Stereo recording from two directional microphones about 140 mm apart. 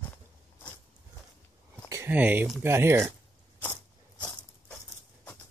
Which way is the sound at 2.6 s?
15° right (ahead or behind).